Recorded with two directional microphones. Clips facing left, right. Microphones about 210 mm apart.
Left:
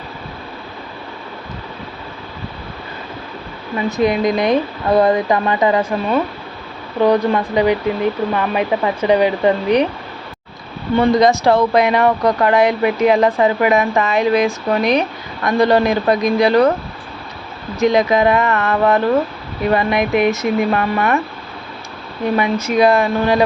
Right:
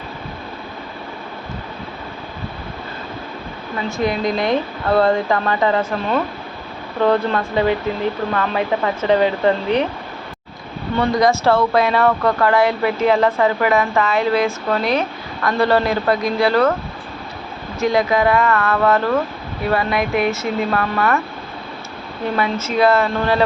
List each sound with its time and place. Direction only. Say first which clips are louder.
3.9 s speech: left 4 dB; 20° left (ahead or behind)
10.9 s speech: left 4 dB; 20° left (ahead or behind)
17.7 s speech: left 3 dB; 20° left (ahead or behind)
22.4 s speech: left 3 dB; 15° left (ahead or behind)